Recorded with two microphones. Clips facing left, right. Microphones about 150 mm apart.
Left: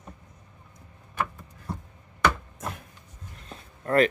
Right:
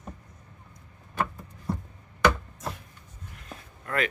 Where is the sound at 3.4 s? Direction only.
30° left (ahead or behind).